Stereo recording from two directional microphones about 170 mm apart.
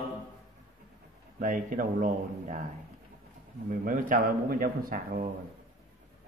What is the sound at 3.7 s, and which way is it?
A man's voice, 55° right (ahead or behind).